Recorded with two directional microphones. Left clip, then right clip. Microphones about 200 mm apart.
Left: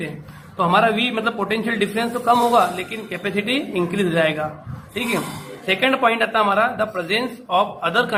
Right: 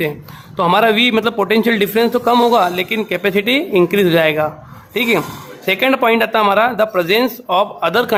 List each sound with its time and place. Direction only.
0.5 s a man's voice: 50° right (ahead or behind)
5.6 s a man's voice: 50° right (ahead or behind)